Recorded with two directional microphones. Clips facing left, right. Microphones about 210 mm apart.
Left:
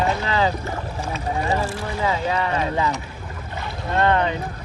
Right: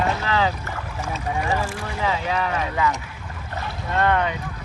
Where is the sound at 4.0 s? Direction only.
25° left (ahead or behind).